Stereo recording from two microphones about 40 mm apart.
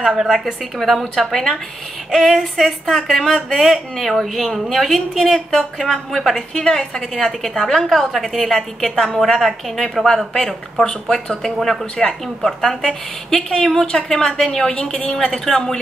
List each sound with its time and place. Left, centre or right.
0.2 s a woman's voice: centre
0.7 s a woman's voice: centre
2.1 s a woman's voice: centre
10.0 s a woman's voice: centre
12.0 s a woman's voice: centre; by 15.3 s left
15.3 s a woman's voice: centre